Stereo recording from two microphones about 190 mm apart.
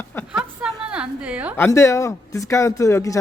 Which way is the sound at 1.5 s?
15° left (ahead or behind).